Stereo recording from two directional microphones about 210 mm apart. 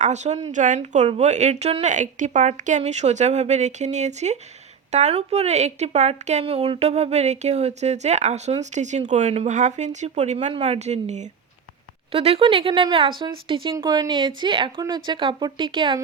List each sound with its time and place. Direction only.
0.0 s a woman's voice: 35° right (ahead or behind)